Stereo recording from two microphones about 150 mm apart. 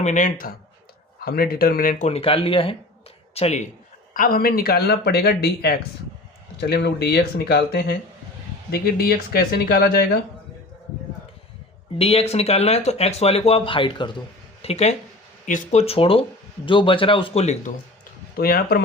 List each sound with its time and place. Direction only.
0.0 s speech: 55° left (ahead or behind)
1.2 s speech: 90° left; by 2.0 s 65° left (ahead or behind)
2.0 s a man's voice: 40° left (ahead or behind)
4.1 s speech: 70° left (ahead or behind); by 10.2 s 90° left
11.9 s speech: 40° left (ahead or behind)
14.6 s a man's voice: 45° left (ahead or behind)
18.3 s speech: 85° left